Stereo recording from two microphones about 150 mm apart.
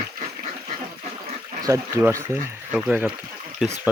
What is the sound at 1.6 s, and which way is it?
Speech, 20° right (ahead or behind).